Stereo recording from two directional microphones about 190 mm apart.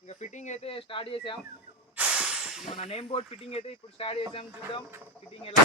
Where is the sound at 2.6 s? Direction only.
35° left (ahead or behind).